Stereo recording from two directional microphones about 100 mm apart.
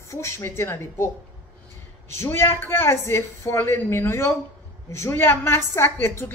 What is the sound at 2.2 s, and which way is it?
Speech, 25° left (ahead or behind).